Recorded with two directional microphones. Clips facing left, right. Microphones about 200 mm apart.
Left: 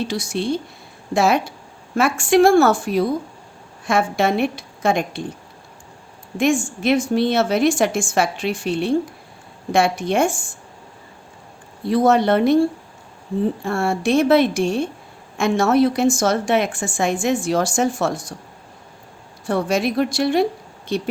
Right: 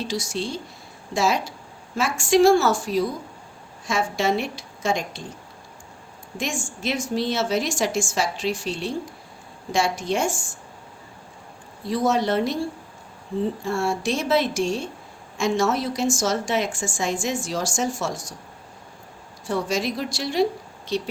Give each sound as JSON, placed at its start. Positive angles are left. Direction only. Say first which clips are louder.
{"t": 0.1, "sound": "a woman's voice", "louder": "left 5 dB", "side_deg": 60}
{"t": 6.3, "sound": "a woman's voice", "louder": "left 11 dB", "side_deg": 60}
{"t": 11.9, "sound": "a woman's voice", "louder": "left 6 dB", "side_deg": 60}
{"t": 13.7, "sound": "a woman's voice", "louder": "left 4 dB", "side_deg": 60}
{"t": 19.5, "sound": "a woman's voice", "louder": "left 5 dB", "side_deg": 60}